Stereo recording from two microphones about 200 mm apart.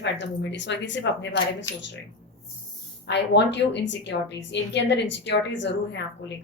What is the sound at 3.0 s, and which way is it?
A woman's voice, 60° left (ahead or behind).